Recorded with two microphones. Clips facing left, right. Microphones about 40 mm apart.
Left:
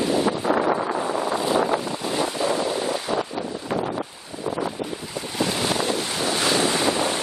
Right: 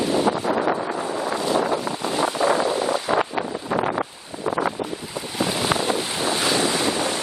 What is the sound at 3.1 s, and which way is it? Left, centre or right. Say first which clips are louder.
Wind: right 4 dB; right.